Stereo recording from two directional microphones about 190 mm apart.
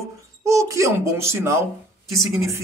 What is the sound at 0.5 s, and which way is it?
Speech, 15° right (ahead or behind).